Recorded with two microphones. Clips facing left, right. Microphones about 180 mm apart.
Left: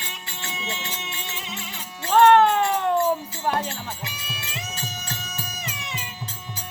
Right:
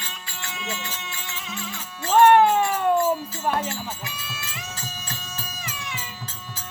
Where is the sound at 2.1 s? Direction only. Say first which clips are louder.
Even; 10° right (ahead or behind).